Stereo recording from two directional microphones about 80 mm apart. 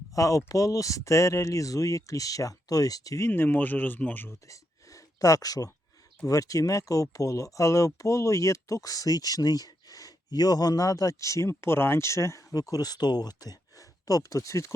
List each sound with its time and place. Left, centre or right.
0.2 s speech: left
3.2 s speech: left
4.4 s a sound: left
6.2 s speech: left